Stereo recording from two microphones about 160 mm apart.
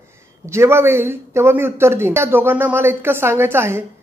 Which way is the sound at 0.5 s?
15° right (ahead or behind).